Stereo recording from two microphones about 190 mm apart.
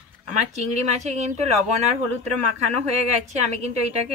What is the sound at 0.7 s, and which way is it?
Speech, 35° right (ahead or behind).